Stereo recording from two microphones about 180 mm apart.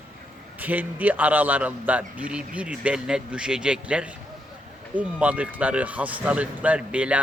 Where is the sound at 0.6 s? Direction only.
10° right (ahead or behind).